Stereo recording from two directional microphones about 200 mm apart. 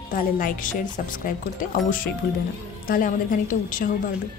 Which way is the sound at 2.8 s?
45° left (ahead or behind).